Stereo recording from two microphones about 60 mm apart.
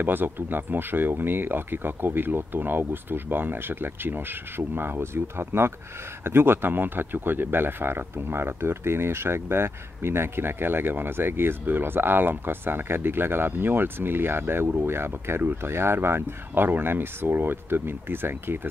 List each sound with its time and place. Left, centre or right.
0.0 s speech: right